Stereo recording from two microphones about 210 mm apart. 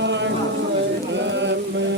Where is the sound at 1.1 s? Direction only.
60° right (ahead or behind).